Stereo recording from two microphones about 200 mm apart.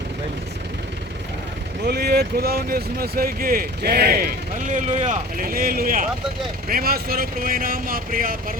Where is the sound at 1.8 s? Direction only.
55° right (ahead or behind).